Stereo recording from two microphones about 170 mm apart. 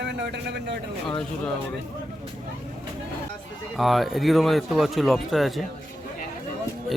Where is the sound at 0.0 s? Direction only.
90° right.